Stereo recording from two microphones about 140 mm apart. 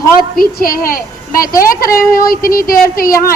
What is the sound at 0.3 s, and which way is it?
A woman's voice, 90° left.